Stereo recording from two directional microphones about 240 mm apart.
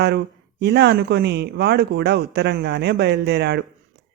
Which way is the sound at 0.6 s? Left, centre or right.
Right.